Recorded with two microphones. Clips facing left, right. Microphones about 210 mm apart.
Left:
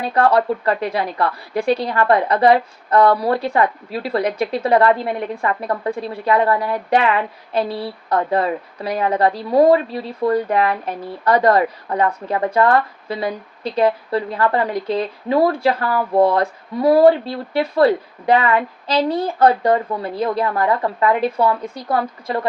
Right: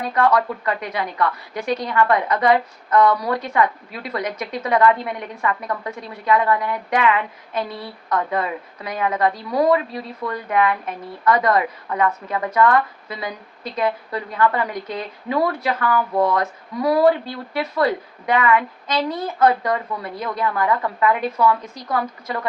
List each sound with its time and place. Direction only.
0.1 s a woman's voice: 30° left (ahead or behind)
8.1 s a woman's voice: 30° left (ahead or behind)